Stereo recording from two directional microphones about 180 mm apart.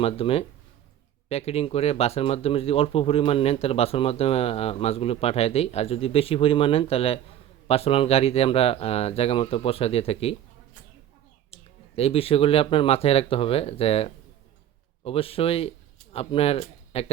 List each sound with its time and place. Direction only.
0.0 s speech: 30° left (ahead or behind)
11.5 s speech: 35° left (ahead or behind)